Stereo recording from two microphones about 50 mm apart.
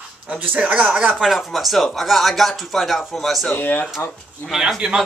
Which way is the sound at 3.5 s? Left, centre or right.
Left.